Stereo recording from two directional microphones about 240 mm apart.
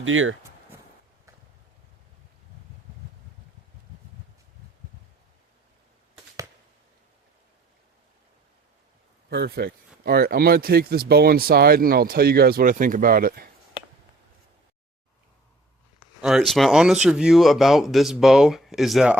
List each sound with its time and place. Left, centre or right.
0.0 s speech: right
9.3 s speech: right
16.2 s speech: centre